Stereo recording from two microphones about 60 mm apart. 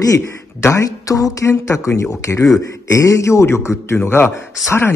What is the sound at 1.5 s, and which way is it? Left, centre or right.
A man's voice, left.